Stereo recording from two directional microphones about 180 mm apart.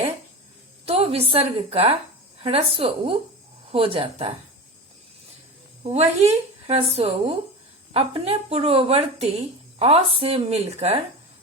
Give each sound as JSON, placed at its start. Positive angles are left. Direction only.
{"t": 0.9, "sound": "speech", "side_deg": -35}
{"t": 5.8, "sound": "speech", "side_deg": -35}